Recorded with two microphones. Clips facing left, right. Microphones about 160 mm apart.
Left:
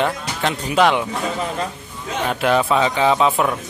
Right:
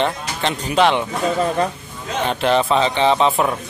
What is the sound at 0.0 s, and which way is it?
Speech, 5° left (ahead or behind).